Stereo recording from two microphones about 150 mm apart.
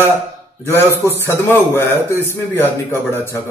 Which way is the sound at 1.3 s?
15° left (ahead or behind).